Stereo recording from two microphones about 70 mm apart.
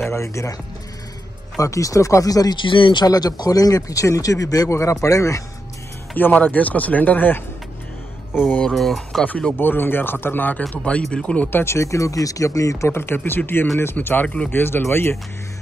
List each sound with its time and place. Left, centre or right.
0.1 s speech: left
1.6 s speech: left
6.1 s speech: left
8.7 s speech: centre
9.2 s speech: left
11.5 s speech: left
14.2 s speech: centre
14.5 s speech: left